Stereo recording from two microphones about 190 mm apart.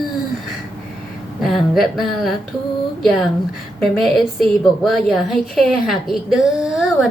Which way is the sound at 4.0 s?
Centre (ahead or behind).